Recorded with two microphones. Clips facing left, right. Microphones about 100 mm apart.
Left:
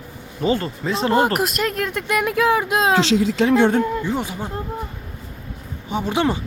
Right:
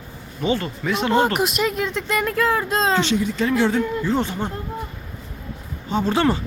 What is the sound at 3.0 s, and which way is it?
Speech, 90° left.